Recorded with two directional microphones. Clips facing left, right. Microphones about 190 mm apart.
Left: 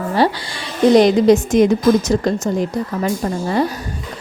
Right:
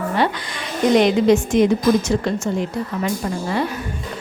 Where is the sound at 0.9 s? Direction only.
35° left (ahead or behind).